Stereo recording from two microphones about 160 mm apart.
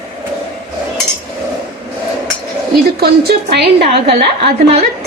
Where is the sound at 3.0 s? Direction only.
80° right.